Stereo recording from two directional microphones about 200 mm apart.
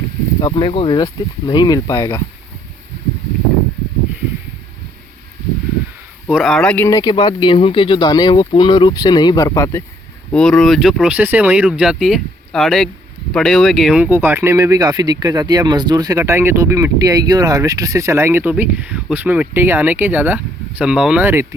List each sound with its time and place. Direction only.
0.4 s speech: 25° left (ahead or behind)
6.3 s speech: centre (ahead or behind)
10.3 s speech: 5° left (ahead or behind)